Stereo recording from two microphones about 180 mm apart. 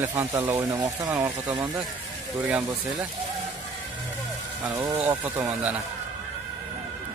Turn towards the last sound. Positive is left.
turn(degrees=-10)  # may be behind; listen again after turning